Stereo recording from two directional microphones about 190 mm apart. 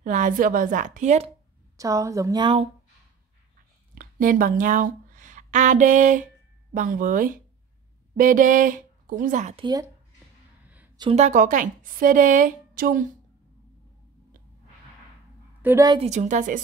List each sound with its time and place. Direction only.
0.0 s a woman's voice: 40° right (ahead or behind)
1.8 s a woman's voice: 15° right (ahead or behind)
3.9 s a woman's voice: 45° right (ahead or behind)
11.0 s a woman's voice: 35° right (ahead or behind)
15.6 s a woman's voice: 15° right (ahead or behind)
16.0 s a woman's voice: 40° right (ahead or behind)